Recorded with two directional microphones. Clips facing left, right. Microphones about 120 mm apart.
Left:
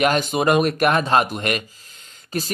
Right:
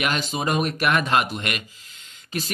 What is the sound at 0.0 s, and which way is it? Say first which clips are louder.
Speech: left 7 dB; 50° left (ahead or behind).